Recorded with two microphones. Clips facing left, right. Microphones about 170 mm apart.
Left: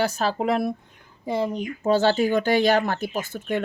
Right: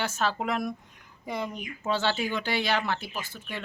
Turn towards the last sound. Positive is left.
turn(degrees=50)  # may be behind; listen again after turning